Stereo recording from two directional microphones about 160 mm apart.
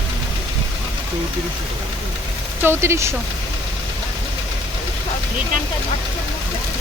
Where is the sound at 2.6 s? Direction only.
15° right (ahead or behind).